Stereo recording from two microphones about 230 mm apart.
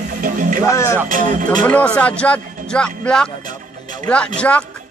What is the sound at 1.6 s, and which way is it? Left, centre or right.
Speech, centre.